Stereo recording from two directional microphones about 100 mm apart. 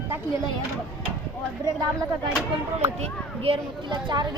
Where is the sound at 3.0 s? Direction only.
70° right (ahead or behind).